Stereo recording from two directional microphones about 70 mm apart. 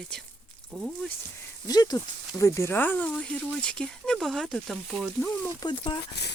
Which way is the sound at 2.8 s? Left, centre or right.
Left.